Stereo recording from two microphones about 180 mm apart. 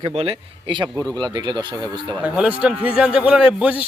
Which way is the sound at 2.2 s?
5° right (ahead or behind).